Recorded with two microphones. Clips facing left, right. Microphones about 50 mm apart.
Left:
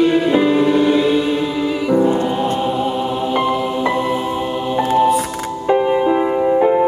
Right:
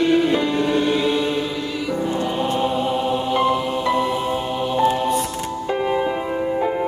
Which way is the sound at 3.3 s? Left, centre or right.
Centre.